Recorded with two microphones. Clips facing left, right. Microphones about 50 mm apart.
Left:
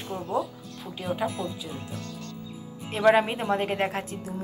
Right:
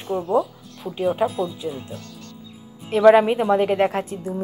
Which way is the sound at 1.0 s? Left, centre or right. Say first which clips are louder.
Right 8 dB; right.